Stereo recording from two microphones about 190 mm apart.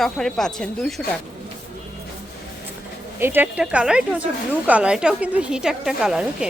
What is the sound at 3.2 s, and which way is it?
Speech, 10° right (ahead or behind).